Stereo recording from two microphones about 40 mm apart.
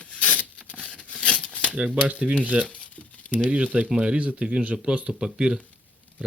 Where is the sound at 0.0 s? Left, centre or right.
Left.